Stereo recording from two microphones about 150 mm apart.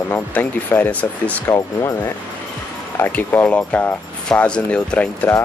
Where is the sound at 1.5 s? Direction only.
25° left (ahead or behind).